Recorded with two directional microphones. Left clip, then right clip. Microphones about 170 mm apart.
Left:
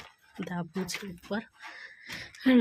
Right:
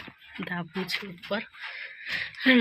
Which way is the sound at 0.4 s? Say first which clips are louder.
Right 3 dB; 20° left (ahead or behind).